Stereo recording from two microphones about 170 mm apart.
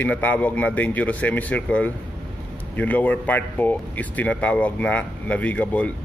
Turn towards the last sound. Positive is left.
turn(degrees=10)  # may be behind; listen again after turning